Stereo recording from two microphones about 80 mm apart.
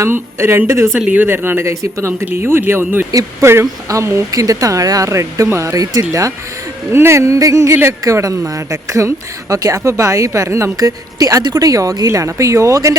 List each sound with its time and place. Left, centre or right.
0.0 s speech: right
0.9 s speech: centre; by 6.3 s right
6.9 s speech: right